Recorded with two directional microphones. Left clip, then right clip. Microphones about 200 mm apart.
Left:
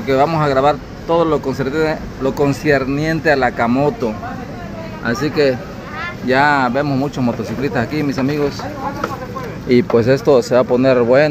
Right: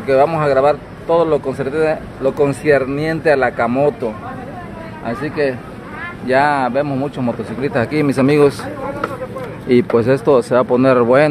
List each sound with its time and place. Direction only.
0.0 s speech: 5° right (ahead or behind)
7.7 s speech: 30° right (ahead or behind)
8.0 s speech: 50° right (ahead or behind)
9.7 s speech: 5° right (ahead or behind)